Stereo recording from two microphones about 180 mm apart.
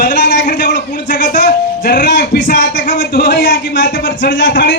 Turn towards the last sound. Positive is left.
turn(degrees=75)  # may be behind; listen again after turning